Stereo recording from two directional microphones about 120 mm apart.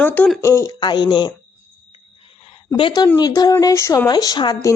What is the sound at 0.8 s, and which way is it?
Speech, 40° left (ahead or behind).